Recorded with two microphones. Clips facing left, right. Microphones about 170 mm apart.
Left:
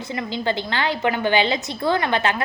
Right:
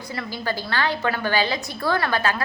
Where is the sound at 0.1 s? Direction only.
20° left (ahead or behind).